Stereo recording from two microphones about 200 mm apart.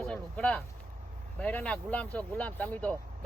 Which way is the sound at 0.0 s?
5° left (ahead or behind).